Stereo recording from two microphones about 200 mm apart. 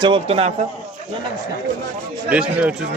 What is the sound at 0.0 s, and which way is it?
Speech, 25° right (ahead or behind).